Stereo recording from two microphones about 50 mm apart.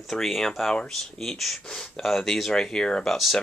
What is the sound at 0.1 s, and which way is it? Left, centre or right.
Speech, centre.